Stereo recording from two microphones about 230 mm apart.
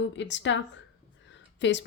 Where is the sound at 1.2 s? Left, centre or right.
Left.